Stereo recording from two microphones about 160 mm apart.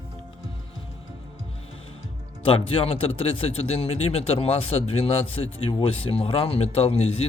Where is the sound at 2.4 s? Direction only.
35° left (ahead or behind).